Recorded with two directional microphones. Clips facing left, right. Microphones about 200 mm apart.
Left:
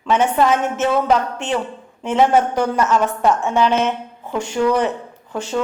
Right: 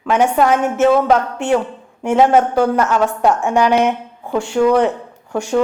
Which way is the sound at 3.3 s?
15° right (ahead or behind).